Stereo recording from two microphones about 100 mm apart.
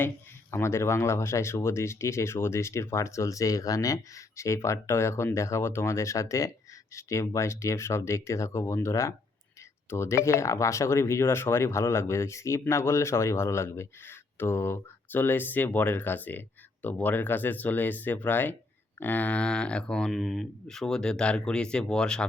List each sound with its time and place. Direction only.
0.5 s speech: 25° left (ahead or behind); by 22.3 s 10° left (ahead or behind)